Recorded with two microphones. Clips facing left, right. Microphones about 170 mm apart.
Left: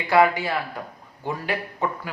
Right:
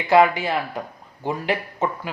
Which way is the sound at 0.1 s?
20° right (ahead or behind).